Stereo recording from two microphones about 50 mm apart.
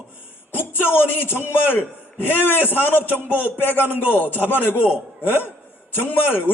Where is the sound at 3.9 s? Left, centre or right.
Right.